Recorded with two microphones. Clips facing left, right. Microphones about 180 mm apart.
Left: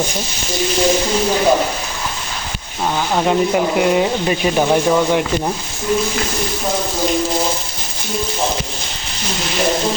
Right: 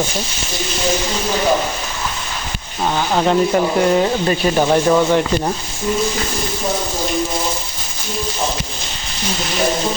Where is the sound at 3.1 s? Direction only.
5° left (ahead or behind).